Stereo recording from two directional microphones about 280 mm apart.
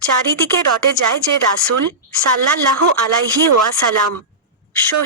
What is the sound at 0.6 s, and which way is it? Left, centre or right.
Speech, right.